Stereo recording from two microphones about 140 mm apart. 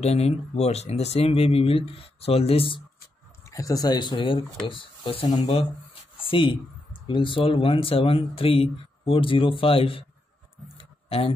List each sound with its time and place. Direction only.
0.0 s speech: 50° left (ahead or behind)
3.4 s speech: 25° left (ahead or behind); by 10.0 s 40° left (ahead or behind)
10.8 s a sound: 40° left (ahead or behind)